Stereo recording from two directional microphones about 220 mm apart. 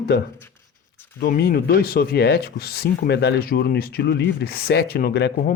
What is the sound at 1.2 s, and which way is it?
Speech, 45° left (ahead or behind).